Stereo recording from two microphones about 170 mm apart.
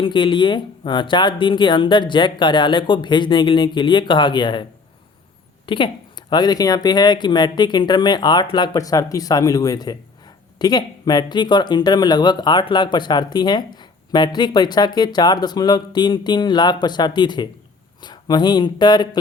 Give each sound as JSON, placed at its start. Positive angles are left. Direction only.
{"t": 0.0, "sound": "speech", "side_deg": 30}
{"t": 5.6, "sound": "a woman's voice", "side_deg": 30}